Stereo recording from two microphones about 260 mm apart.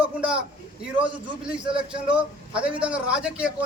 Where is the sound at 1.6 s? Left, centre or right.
Centre.